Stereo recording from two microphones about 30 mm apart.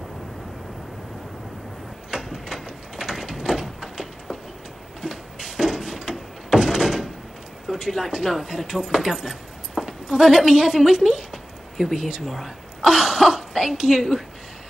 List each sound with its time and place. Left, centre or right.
2.2 s sliding door: centre
3.9 s a sound: centre
6.5 s door: centre
7.7 s a sound: right
8.2 s a woman's voice: centre
12.2 s speech: centre
12.8 s speech: centre